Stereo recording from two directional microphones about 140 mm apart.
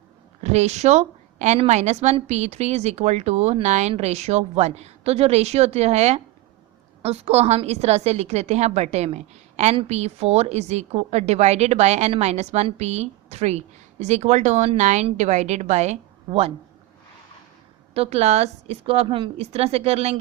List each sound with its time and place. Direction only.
0.4 s a woman's voice: 50° right (ahead or behind)
17.9 s a woman's voice: 45° right (ahead or behind)